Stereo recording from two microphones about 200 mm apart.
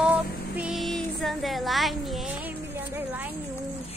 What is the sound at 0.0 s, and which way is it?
Child singing, 5° right (ahead or behind).